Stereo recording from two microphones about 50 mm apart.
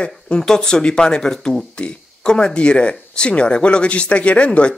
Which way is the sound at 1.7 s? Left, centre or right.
Centre.